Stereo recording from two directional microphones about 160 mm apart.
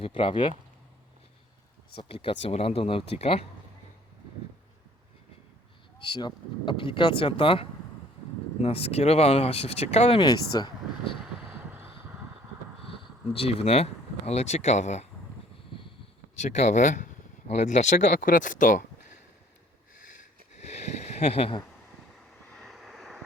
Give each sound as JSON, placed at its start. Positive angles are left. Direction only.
{"t": 0.0, "sound": "speech", "side_deg": 35}
{"t": 2.0, "sound": "speech", "side_deg": 35}
{"t": 6.0, "sound": "speech", "side_deg": 30}
{"t": 10.2, "sound": "speech", "side_deg": 25}
{"t": 11.2, "sound": "vehicle", "side_deg": -10}
{"t": 12.9, "sound": "speech", "side_deg": 35}
{"t": 16.3, "sound": "speech", "side_deg": 45}
{"t": 20.6, "sound": "a sound", "side_deg": 45}
{"t": 22.5, "sound": "vehicle", "side_deg": 0}